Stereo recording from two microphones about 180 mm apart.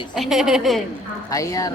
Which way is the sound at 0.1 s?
Centre (ahead or behind).